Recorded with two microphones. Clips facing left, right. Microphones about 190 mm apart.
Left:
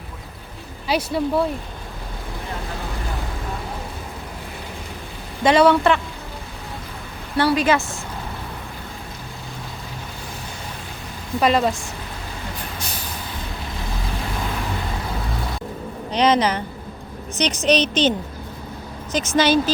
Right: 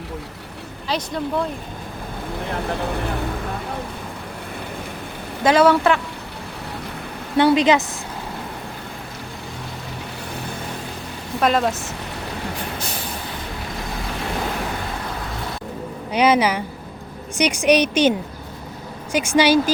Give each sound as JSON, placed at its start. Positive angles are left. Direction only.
{"t": 0.9, "sound": "speech", "side_deg": 10}
{"t": 5.4, "sound": "speech", "side_deg": -5}
{"t": 7.3, "sound": "a woman's voice", "side_deg": -20}
{"t": 11.3, "sound": "speech", "side_deg": 0}
{"t": 16.1, "sound": "a woman's voice", "side_deg": -10}
{"t": 19.1, "sound": "a woman's voice", "side_deg": -10}